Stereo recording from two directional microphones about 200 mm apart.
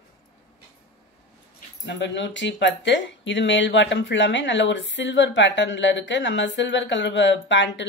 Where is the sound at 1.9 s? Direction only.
60° left (ahead or behind).